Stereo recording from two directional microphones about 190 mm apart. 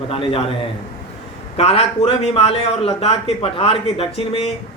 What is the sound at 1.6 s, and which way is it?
A man's voice, 35° left (ahead or behind).